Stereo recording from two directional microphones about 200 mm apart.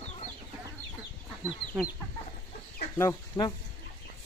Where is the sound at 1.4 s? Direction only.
5° right (ahead or behind).